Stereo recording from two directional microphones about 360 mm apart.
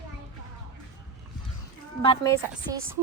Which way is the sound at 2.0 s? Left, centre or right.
Centre.